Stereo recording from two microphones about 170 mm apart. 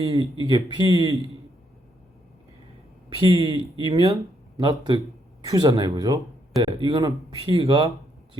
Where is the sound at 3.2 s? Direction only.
30° right (ahead or behind).